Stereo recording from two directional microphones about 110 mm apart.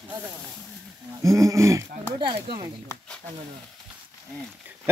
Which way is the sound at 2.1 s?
45° right (ahead or behind).